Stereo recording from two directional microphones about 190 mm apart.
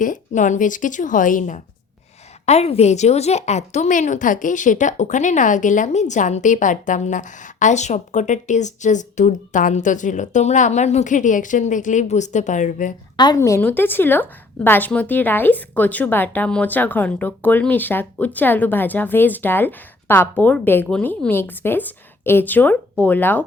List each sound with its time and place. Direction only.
0.0 s a woman's voice: 45° left (ahead or behind)
13.1 s a woman's voice: 20° left (ahead or behind)